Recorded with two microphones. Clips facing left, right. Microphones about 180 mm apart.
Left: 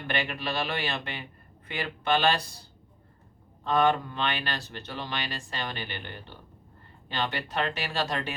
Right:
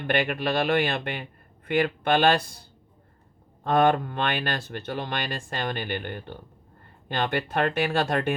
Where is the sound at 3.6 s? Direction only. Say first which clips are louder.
Right 3 dB; 50° right (ahead or behind).